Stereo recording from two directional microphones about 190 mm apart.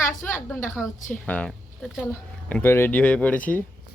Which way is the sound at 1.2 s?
5° left (ahead or behind).